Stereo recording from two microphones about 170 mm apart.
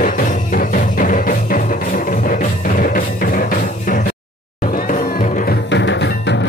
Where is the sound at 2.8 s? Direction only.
50° left (ahead or behind).